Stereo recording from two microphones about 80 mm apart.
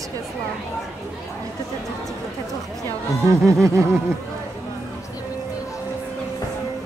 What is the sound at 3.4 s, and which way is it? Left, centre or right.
Music, right.